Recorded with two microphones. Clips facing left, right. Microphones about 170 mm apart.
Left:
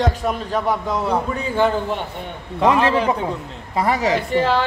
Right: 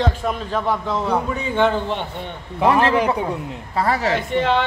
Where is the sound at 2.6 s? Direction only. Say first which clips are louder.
Even; 20° left (ahead or behind).